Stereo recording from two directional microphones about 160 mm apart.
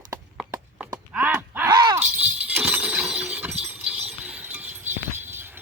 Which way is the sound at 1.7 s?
25° right (ahead or behind).